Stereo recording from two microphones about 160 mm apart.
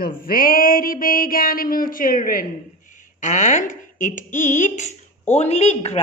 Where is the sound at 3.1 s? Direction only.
50° left (ahead or behind).